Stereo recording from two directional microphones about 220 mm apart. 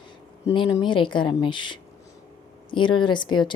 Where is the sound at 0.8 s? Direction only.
20° left (ahead or behind).